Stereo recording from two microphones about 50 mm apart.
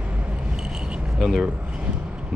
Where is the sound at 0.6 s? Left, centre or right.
Centre.